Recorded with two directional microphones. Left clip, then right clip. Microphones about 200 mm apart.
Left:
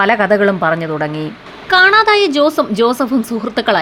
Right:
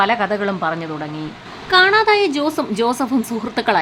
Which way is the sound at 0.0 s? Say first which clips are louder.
Left 6 dB; 20° left (ahead or behind).